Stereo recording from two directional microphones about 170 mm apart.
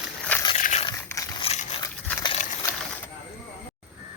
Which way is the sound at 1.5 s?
35° left (ahead or behind).